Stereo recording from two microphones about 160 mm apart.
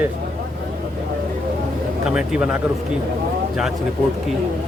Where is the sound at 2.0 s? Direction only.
5° right (ahead or behind).